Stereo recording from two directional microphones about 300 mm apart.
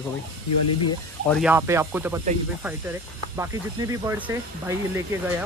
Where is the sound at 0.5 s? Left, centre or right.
Left.